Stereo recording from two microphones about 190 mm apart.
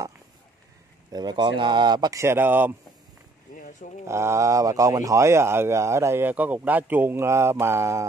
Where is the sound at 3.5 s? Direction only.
45° left (ahead or behind).